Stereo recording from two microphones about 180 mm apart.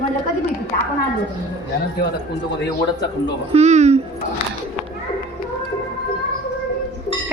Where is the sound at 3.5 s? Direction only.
40° right (ahead or behind).